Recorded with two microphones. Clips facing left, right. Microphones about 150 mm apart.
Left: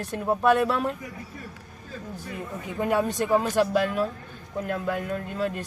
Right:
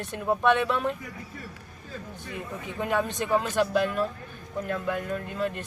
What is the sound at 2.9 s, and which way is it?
Speech, 10° left (ahead or behind).